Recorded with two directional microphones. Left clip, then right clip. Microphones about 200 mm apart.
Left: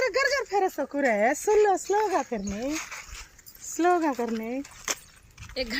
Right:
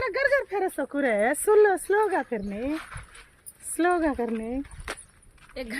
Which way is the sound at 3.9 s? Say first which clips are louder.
Left 1 dB; 25° right (ahead or behind).